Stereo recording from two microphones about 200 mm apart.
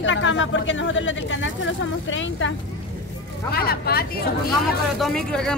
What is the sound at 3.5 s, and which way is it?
Speech, 50° left (ahead or behind).